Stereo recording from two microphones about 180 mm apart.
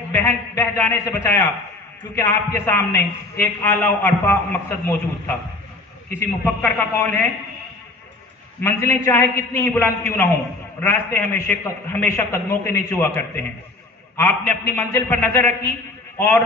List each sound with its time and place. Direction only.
0.1 s a man's voice: 15° left (ahead or behind)
8.5 s a man's voice: 15° left (ahead or behind)
14.1 s a man's voice: 15° left (ahead or behind)